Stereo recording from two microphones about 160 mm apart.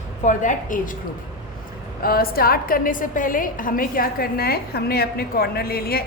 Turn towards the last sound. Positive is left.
turn(degrees=70)  # may be behind; listen again after turning